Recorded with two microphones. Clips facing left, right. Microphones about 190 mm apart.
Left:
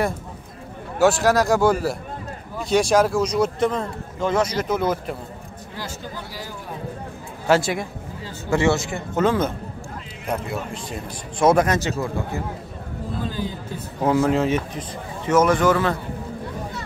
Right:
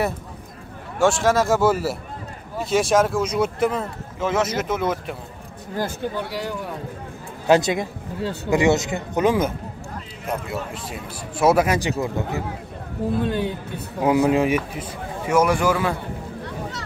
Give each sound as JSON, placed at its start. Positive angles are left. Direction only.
{"t": 0.9, "sound": "a man's voice", "side_deg": 0}
{"t": 5.8, "sound": "speech", "side_deg": -60}
{"t": 7.4, "sound": "a man's voice", "side_deg": -20}
{"t": 10.5, "sound": "a man's voice", "side_deg": -5}
{"t": 13.2, "sound": "speech", "side_deg": -65}
{"t": 14.0, "sound": "a man's voice", "side_deg": -15}